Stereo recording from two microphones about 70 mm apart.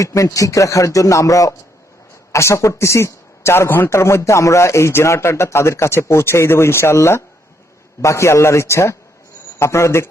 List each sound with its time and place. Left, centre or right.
0.0 s a man's voice: left